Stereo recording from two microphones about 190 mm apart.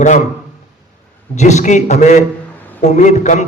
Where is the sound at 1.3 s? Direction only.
40° left (ahead or behind).